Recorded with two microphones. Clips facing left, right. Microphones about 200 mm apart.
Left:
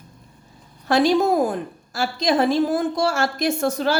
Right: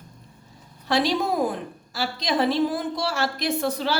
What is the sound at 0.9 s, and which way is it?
A woman's voice, 50° left (ahead or behind).